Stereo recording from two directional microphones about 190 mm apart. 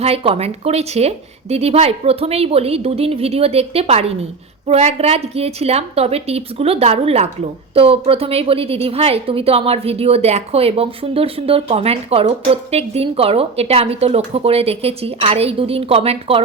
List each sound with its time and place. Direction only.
0.0 s a woman's voice: 30° right (ahead or behind)